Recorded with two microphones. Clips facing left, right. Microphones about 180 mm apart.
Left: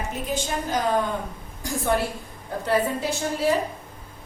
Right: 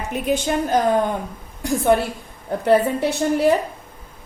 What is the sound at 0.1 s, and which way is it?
Speech, 65° right (ahead or behind).